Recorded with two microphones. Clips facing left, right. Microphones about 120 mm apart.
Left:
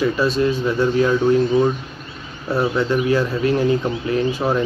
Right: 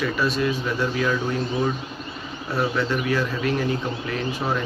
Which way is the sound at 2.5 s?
25° left (ahead or behind).